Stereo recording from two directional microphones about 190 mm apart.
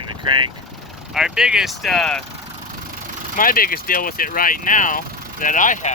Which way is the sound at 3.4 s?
50° left (ahead or behind).